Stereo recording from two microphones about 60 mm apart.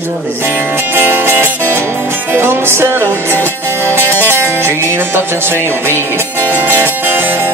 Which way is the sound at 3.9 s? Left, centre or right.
Left.